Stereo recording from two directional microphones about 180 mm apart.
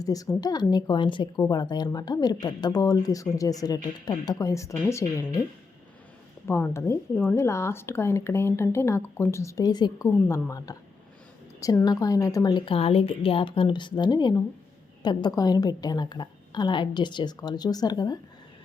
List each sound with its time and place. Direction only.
0.0 s a woman's voice: 20° left (ahead or behind)
6.5 s speech: 15° left (ahead or behind)